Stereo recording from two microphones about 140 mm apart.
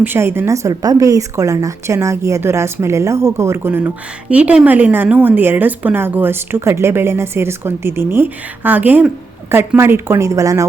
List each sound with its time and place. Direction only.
0.0 s a woman's voice: 15° right (ahead or behind)